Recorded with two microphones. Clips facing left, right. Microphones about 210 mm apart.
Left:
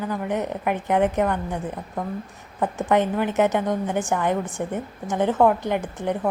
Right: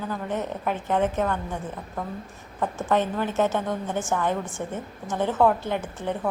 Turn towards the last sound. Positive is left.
turn(degrees=15)  # may be behind; listen again after turning